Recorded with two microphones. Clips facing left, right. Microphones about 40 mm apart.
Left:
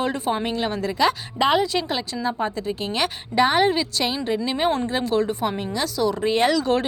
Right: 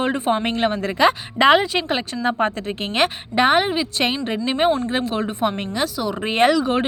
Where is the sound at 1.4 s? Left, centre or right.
Right.